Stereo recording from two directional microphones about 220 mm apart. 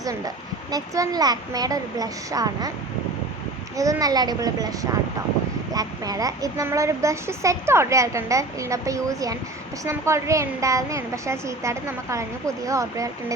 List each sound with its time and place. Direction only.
0.0 s a child's voice: 15° right (ahead or behind)
3.8 s a child's voice: 15° right (ahead or behind)